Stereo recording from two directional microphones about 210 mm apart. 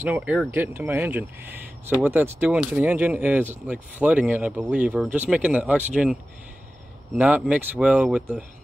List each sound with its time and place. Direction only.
0.0 s speech: 5° right (ahead or behind)
7.2 s speech: 5° right (ahead or behind)